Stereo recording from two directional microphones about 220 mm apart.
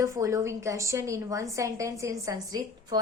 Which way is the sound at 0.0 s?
15° right (ahead or behind).